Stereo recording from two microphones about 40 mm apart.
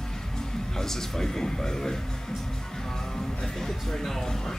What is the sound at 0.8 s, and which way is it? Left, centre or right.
Speech, centre.